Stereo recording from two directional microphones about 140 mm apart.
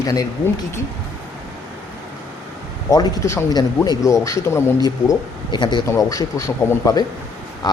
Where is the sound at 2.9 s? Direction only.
25° left (ahead or behind).